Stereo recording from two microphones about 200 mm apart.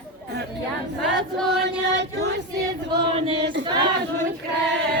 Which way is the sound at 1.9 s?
60° right (ahead or behind).